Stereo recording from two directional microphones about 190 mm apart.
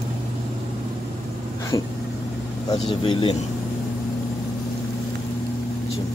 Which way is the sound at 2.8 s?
25° left (ahead or behind).